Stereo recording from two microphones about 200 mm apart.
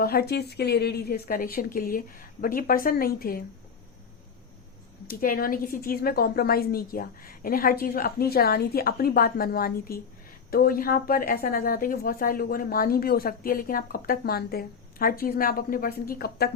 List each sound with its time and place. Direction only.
0.0 s a woman's voice: 50° left (ahead or behind)
5.0 s a woman's voice: 45° left (ahead or behind)